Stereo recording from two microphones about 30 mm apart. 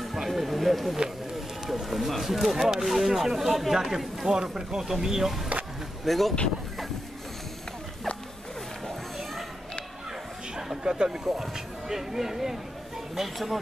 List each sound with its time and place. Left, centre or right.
0.1 s a sound: centre
1.7 s speech: centre
4.3 s speech: right
6.0 s speech: centre
10.8 s speech: right
11.1 s speech: centre